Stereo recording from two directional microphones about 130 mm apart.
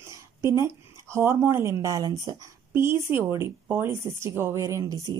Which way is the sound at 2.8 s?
15° right (ahead or behind).